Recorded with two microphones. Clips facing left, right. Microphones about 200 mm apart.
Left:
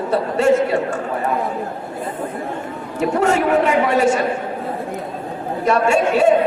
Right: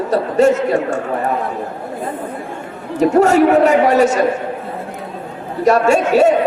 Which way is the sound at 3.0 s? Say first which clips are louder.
Right 6 dB; 40° right (ahead or behind).